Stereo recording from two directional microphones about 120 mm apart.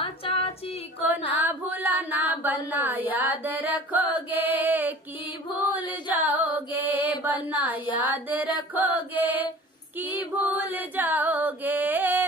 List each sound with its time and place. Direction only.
0.0 s a sound: 50° left (ahead or behind)
1.0 s a sound: 15° right (ahead or behind)
4.3 s mantra: 15° right (ahead or behind)
6.0 s carnatic music: 15° right (ahead or behind)
7.9 s music: 15° right (ahead or behind)
9.9 s female singing: 15° right (ahead or behind)